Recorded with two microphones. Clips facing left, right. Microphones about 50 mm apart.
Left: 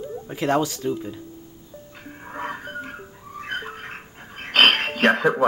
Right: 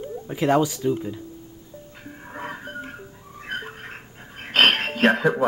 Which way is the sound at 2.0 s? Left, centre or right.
Centre.